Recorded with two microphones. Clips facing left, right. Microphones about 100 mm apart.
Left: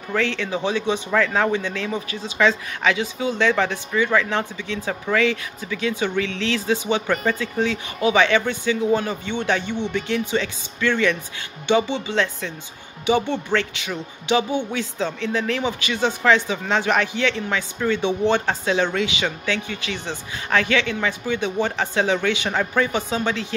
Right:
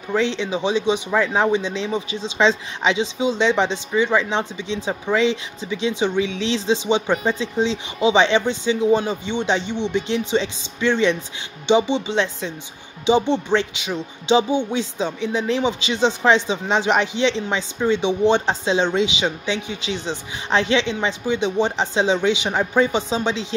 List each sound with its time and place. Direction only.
0.1 s speech: 20° right (ahead or behind)